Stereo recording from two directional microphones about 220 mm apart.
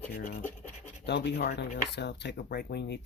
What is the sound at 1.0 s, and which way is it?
Speech, 50° left (ahead or behind).